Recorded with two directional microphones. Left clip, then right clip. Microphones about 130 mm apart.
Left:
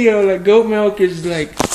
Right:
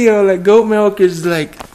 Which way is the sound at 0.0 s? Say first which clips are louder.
Right 2 dB; 40° right (ahead or behind).